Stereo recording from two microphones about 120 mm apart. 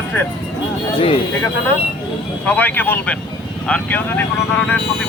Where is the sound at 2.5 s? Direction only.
15° left (ahead or behind).